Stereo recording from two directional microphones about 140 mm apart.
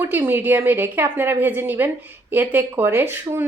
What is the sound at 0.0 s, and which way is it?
Speech, 15° right (ahead or behind).